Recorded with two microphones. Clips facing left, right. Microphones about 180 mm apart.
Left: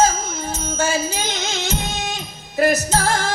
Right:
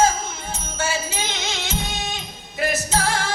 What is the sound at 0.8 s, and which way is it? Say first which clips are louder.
Music: left 4 dB; 40° left (ahead or behind).